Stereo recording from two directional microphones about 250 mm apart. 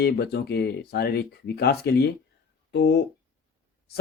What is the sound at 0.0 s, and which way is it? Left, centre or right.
Speech, left.